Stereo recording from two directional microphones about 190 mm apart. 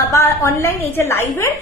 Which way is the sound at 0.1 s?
15° left (ahead or behind).